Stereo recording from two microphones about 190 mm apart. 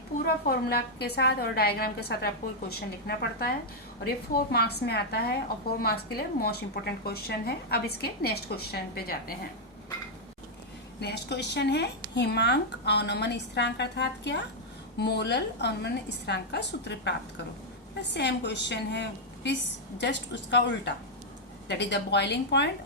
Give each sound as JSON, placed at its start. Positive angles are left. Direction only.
{"t": 0.4, "sound": "a woman's voice", "side_deg": 55}
{"t": 11.0, "sound": "a woman's voice", "side_deg": 60}